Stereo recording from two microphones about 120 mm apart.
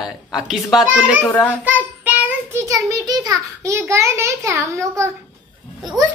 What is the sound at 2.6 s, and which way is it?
A child's voice, 25° right (ahead or behind).